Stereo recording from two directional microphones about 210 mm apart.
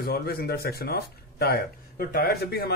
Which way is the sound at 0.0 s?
45° left (ahead or behind).